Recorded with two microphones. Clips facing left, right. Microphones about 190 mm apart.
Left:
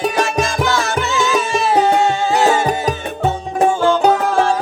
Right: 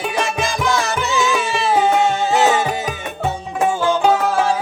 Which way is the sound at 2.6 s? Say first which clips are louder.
Left 4 dB; 40° left (ahead or behind).